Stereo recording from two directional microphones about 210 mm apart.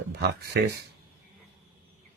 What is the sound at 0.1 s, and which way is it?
Speech, 50° right (ahead or behind).